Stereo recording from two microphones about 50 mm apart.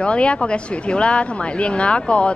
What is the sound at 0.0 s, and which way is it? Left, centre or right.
Speech, left.